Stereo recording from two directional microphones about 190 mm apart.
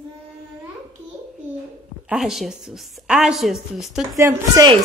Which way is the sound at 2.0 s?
Centre (ahead or behind).